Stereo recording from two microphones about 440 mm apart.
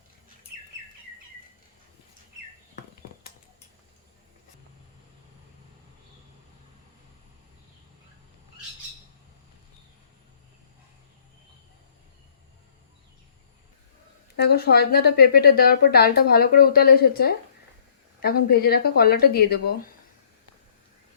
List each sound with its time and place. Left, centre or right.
14.3 s a woman's voice: left